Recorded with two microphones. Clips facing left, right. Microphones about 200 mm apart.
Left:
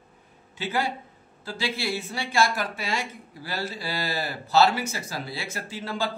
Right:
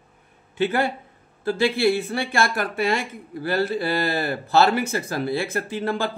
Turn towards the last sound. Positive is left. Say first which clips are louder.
# right 5 dB
turn(degrees=-55)  # may be behind; listen again after turning